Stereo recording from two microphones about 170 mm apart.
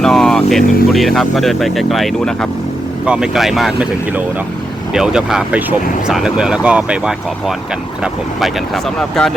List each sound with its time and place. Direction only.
0.0 s speech: 5° left (ahead or behind)